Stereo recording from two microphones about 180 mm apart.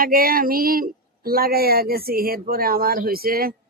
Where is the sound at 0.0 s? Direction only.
55° right (ahead or behind).